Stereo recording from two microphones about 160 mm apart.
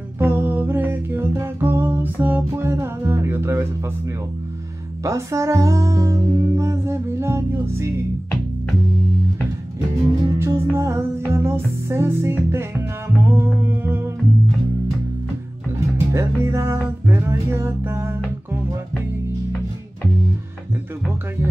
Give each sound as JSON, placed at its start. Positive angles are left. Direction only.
{"t": 0.2, "sound": "music", "side_deg": -15}
{"t": 5.0, "sound": "music", "side_deg": -20}
{"t": 10.2, "sound": "music", "side_deg": -20}
{"t": 16.1, "sound": "music", "side_deg": -15}